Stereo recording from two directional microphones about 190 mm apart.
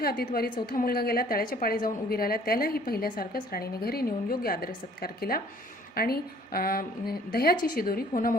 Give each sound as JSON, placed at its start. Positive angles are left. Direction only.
{"t": 0.0, "sound": "a woman's voice", "side_deg": 55}